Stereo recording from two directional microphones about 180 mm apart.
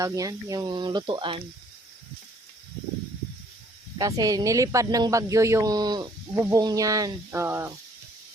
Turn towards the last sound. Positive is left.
turn(degrees=-15)  # may be behind; listen again after turning